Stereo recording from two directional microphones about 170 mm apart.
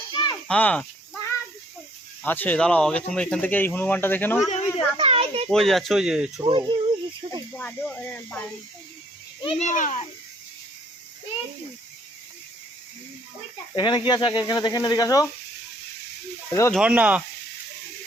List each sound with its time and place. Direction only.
0.1 s a sound: 25° left (ahead or behind)
0.4 s a sound: 5° left (ahead or behind)
2.2 s speech: 10° left (ahead or behind)
4.4 s a child's voice: 40° left (ahead or behind)
4.9 s children playing: 35° right (ahead or behind)
5.5 s speech: centre (ahead or behind)
6.5 s speech: 25° right (ahead or behind)
7.5 s speech: 5° left (ahead or behind)
9.4 s speech: 35° left (ahead or behind)
13.7 s speech: 25° left (ahead or behind)
16.5 s speech: 20° left (ahead or behind)
16.7 s speech: 5° right (ahead or behind)